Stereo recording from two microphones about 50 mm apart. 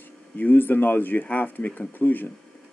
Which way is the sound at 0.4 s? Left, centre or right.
Left.